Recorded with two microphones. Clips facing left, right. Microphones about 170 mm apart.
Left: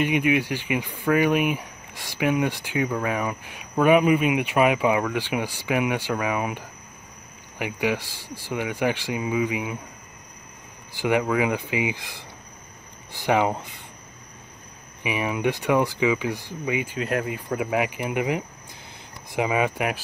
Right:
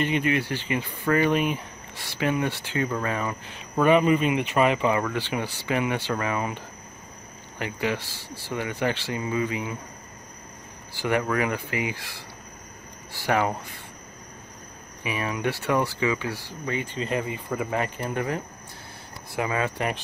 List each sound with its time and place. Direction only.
0.0 s speech: 10° left (ahead or behind)
11.0 s speech: 15° left (ahead or behind)
15.0 s speech: 15° left (ahead or behind)